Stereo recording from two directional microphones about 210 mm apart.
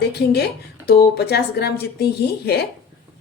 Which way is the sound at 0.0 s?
50° left (ahead or behind).